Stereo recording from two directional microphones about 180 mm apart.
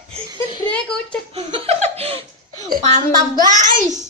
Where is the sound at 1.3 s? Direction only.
35° right (ahead or behind).